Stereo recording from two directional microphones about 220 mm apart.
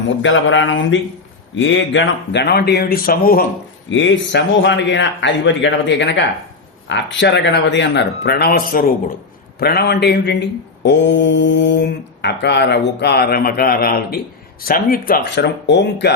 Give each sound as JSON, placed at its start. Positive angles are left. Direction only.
{"t": 0.2, "sound": "a man's voice", "side_deg": 60}
{"t": 3.8, "sound": "a man's voice", "side_deg": 55}